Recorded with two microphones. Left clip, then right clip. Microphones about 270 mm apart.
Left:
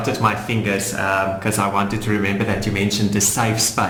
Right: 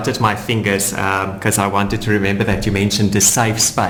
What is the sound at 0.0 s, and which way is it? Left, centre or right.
Speech, right.